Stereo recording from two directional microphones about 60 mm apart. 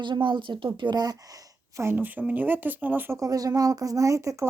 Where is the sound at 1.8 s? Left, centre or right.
Right.